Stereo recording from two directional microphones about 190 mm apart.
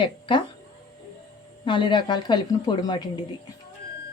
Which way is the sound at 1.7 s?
25° left (ahead or behind).